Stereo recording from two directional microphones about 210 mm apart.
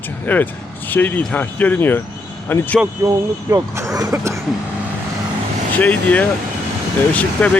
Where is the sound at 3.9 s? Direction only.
15° right (ahead or behind).